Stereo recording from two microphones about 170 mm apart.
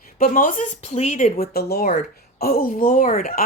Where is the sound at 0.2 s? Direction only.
50° left (ahead or behind).